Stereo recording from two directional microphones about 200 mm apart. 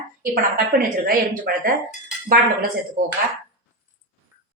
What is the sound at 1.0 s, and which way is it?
Speech, 45° right (ahead or behind).